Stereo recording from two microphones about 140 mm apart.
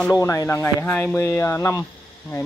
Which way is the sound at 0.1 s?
25° left (ahead or behind).